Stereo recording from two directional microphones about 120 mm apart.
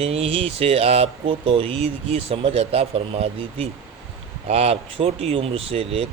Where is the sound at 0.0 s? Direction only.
55° right (ahead or behind).